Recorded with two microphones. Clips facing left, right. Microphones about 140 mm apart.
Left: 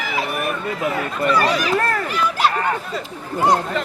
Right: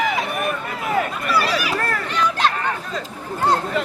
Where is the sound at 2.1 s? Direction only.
10° left (ahead or behind).